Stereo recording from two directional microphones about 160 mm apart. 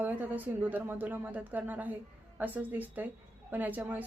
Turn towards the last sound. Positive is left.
turn(degrees=-10)  # may be behind; listen again after turning